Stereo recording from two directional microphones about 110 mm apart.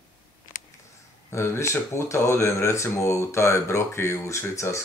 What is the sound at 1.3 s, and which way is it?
Speech, 25° left (ahead or behind).